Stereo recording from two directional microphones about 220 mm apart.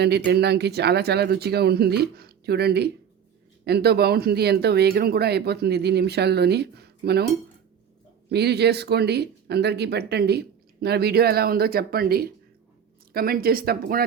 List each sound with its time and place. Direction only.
0.3 s speech: 50° right (ahead or behind)
8.3 s speech: 50° right (ahead or behind)